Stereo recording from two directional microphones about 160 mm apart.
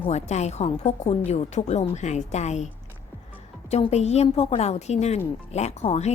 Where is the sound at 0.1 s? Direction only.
45° left (ahead or behind).